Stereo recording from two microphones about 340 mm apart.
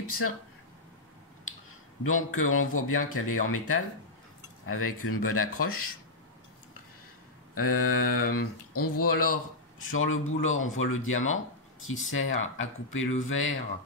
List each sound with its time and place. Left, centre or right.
2.0 s speech: left
7.5 s speech: left